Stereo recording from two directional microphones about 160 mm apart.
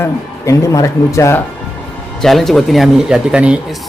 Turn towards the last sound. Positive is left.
turn(degrees=-5)  # may be behind; listen again after turning